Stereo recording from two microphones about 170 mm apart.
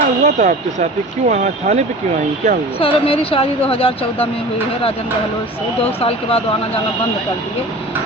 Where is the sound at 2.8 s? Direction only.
30° left (ahead or behind).